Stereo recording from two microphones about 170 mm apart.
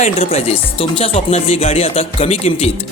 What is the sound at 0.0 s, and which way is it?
Speech, 35° left (ahead or behind).